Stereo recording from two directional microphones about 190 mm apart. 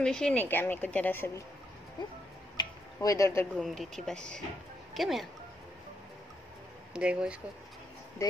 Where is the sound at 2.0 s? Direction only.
25° left (ahead or behind).